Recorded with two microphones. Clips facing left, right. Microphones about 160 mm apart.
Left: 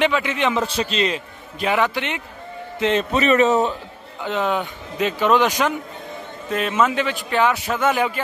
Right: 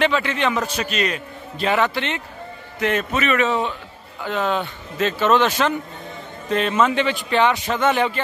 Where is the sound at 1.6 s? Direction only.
10° left (ahead or behind).